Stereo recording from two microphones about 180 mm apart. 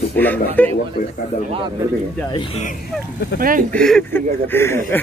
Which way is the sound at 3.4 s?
50° right (ahead or behind).